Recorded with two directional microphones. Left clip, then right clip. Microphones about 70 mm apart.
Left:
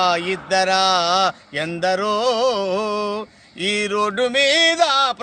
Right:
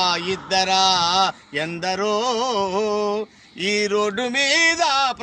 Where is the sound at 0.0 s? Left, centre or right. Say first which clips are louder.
Left 2 dB; centre; by 3.7 s left.